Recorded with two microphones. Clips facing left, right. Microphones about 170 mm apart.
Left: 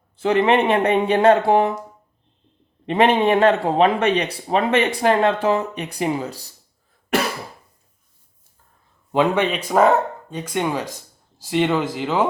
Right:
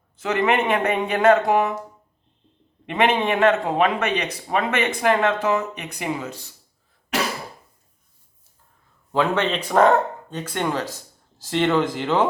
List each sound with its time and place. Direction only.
0.2 s a man's voice: 30° left (ahead or behind)
2.8 s a man's voice: 35° left (ahead or behind)
9.1 s speech: 15° left (ahead or behind)